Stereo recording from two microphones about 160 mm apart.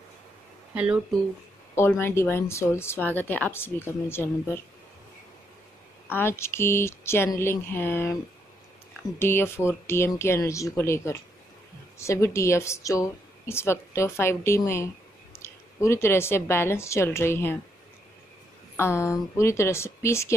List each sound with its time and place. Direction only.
0.7 s speech: 10° right (ahead or behind)
1.8 s a woman's voice: 15° left (ahead or behind)
6.0 s a woman's voice: 15° left (ahead or behind)
9.2 s a woman's voice: 15° left (ahead or behind)
18.8 s a woman's voice: 15° left (ahead or behind)